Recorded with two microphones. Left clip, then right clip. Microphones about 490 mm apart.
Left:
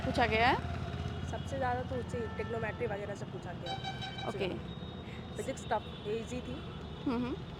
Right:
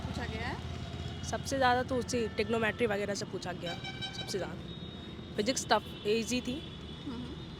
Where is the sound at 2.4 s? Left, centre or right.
Right.